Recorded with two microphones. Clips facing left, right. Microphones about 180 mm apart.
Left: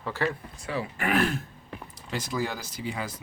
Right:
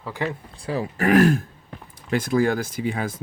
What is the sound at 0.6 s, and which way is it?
Speech, 40° right (ahead or behind).